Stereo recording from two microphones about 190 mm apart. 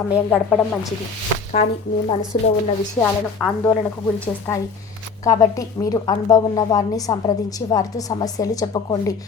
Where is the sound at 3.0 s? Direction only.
5° left (ahead or behind).